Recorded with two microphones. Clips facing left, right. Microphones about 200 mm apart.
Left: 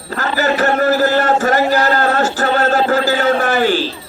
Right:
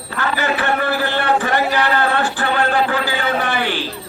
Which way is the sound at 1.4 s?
40° left (ahead or behind).